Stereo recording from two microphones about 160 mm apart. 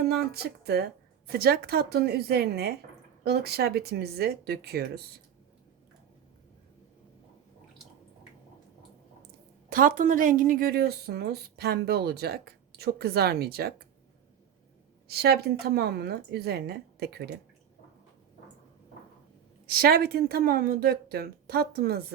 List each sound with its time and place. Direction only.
0.3 s speech: 90° right
1.3 s a woman's voice: 75° right (ahead or behind)
9.6 s a woman's voice: 60° right (ahead or behind); by 13.7 s 80° right
15.0 s a woman's voice: 85° right
19.6 s a woman's voice: 70° right (ahead or behind)